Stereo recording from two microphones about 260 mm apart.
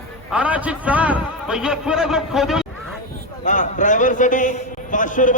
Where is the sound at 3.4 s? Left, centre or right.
Left.